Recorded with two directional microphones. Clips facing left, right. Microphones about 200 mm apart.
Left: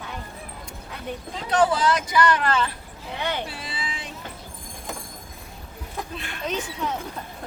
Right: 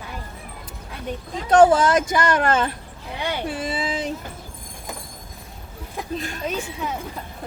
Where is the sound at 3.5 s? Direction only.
50° right (ahead or behind).